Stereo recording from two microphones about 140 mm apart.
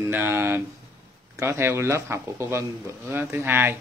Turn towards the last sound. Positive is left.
turn(degrees=-15)  # may be behind; listen again after turning